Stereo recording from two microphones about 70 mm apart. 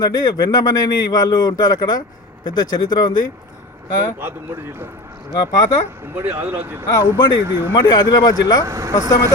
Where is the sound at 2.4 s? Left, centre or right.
Left.